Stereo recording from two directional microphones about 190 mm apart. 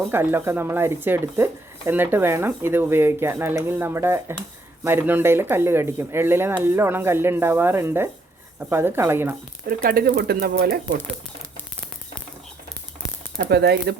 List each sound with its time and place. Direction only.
0.1 s speech: 10° right (ahead or behind)
9.6 s speech: 50° right (ahead or behind)
13.3 s speech: 55° right (ahead or behind)